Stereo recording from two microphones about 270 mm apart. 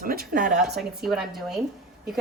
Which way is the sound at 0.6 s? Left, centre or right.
Centre.